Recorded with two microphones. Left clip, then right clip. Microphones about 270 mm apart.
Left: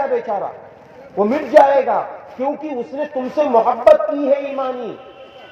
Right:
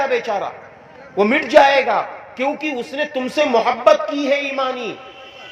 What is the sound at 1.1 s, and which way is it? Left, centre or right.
A man's voice, right.